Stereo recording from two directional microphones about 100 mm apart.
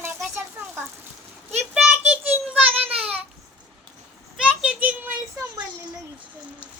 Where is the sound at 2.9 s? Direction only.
80° right.